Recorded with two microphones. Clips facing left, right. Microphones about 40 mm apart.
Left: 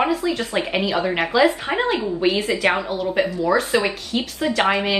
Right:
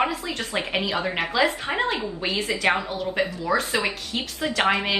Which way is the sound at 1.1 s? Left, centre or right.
Centre.